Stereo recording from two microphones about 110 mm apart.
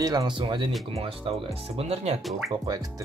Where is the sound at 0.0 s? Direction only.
40° right (ahead or behind); by 2.1 s 70° right (ahead or behind).